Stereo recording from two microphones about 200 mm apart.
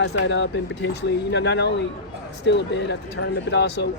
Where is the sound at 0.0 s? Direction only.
60° left (ahead or behind).